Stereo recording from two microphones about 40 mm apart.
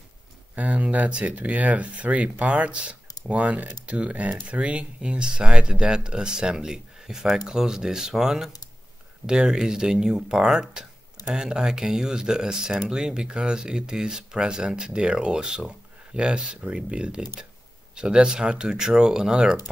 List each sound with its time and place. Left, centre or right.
0.6 s speech: right; by 19.5 s centre